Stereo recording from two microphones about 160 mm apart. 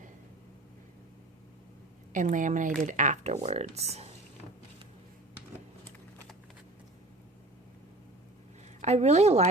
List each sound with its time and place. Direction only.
2.1 s speech: 55° right (ahead or behind)
8.8 s a woman's voice: 45° right (ahead or behind)